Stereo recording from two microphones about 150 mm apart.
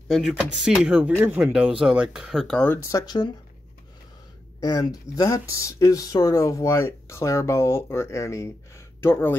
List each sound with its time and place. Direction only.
0.1 s speech: 5° right (ahead or behind); by 3.3 s 25° left (ahead or behind)
4.6 s speech: 25° left (ahead or behind)